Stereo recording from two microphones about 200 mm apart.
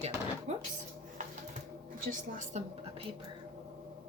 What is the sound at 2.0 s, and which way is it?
A woman's voice, 40° right (ahead or behind).